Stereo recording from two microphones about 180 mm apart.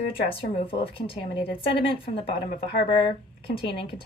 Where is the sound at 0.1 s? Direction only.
30° left (ahead or behind).